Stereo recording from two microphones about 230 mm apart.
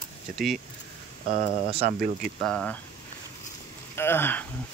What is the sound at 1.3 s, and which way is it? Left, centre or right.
Speech, right.